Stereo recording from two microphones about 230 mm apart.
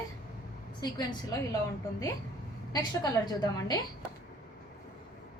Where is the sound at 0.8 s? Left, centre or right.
Centre.